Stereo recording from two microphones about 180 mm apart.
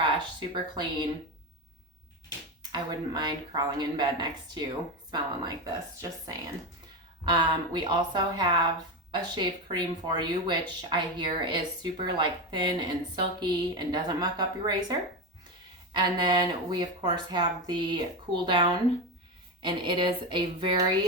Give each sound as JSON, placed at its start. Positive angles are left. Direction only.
{"t": 0.0, "sound": "speech", "side_deg": -25}
{"t": 2.7, "sound": "speech", "side_deg": -25}